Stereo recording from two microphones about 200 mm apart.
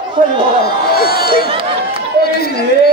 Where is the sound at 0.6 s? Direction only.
50° left (ahead or behind).